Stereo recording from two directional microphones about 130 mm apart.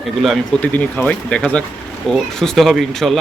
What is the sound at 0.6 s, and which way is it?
Speech, 10° left (ahead or behind).